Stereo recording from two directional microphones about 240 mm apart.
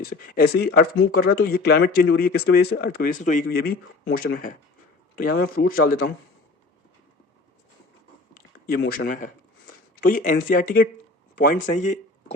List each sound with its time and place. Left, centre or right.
0.0 s speech: left
8.6 s speech: left